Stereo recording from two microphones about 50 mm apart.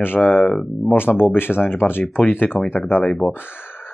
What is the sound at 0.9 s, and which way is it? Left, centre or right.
Speech, left.